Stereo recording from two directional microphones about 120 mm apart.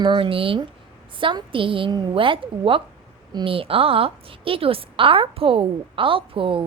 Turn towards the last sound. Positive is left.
turn(degrees=-45)  # may be behind; listen again after turning